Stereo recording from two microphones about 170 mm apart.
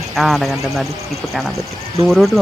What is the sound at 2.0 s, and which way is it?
Speech, centre (ahead or behind).